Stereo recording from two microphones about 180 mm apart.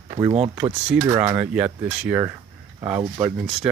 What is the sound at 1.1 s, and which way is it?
Speech, 15° right (ahead or behind).